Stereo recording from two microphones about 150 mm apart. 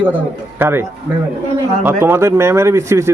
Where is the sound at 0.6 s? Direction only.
15° right (ahead or behind).